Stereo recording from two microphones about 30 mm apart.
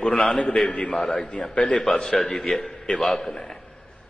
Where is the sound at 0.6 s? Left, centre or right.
Left.